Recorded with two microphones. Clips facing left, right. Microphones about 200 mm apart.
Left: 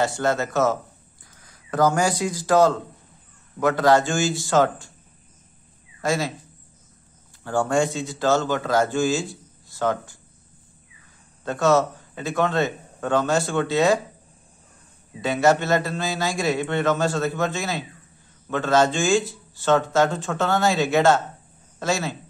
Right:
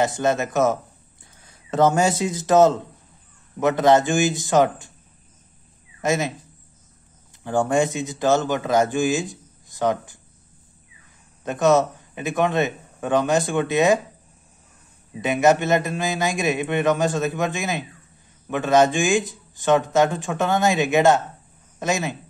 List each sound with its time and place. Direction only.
0.0 s speech: 20° right (ahead or behind)
5.9 s speech: 20° right (ahead or behind)
7.4 s speech: 20° right (ahead or behind)
11.4 s speech: 20° right (ahead or behind)
15.2 s speech: 15° right (ahead or behind)